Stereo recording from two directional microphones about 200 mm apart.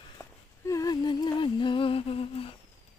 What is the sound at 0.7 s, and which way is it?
Humming, 20° left (ahead or behind).